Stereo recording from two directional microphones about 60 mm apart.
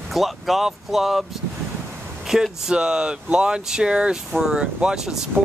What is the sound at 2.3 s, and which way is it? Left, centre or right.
Speech, centre.